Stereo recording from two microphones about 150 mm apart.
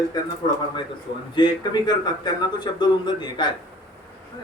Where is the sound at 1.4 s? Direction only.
30° left (ahead or behind).